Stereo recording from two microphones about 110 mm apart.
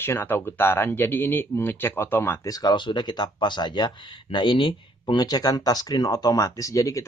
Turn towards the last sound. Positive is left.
turn(degrees=30)  # may be behind; listen again after turning